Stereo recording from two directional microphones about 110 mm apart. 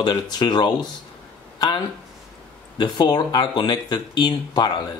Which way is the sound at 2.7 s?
45° left (ahead or behind).